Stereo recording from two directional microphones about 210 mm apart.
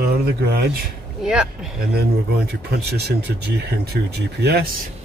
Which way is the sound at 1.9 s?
50° right (ahead or behind).